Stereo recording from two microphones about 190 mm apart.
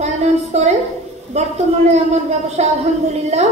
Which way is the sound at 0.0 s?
35° right (ahead or behind).